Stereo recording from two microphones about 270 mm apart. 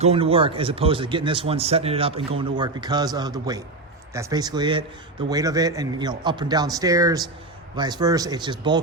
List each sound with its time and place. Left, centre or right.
0.0 s a man's voice: right